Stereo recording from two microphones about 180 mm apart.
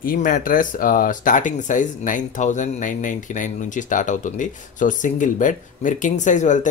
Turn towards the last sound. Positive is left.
turn(degrees=45)  # may be behind; listen again after turning